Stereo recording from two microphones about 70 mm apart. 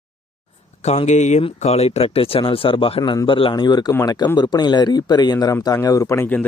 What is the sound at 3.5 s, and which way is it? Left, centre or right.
Speech, left.